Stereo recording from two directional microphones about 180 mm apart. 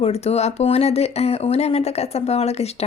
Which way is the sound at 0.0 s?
35° left (ahead or behind).